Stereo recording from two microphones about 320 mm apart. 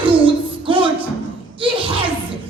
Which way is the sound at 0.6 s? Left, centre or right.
Centre.